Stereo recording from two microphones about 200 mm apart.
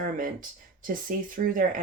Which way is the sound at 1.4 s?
40° right (ahead or behind).